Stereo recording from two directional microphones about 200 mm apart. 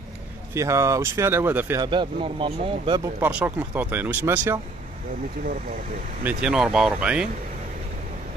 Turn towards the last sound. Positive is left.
turn(degrees=-5)  # may be behind; listen again after turning